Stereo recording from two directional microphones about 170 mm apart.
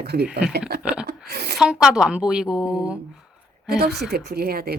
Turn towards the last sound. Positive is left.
turn(degrees=-65)  # may be behind; listen again after turning